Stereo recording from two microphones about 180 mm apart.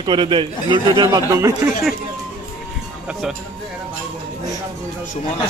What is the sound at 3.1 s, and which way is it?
Speech, 5° right (ahead or behind).